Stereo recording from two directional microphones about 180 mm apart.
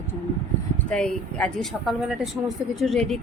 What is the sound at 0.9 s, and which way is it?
A woman's voice, 5° left (ahead or behind).